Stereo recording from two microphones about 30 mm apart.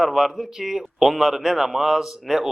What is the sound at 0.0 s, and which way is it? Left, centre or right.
A man's voice, centre.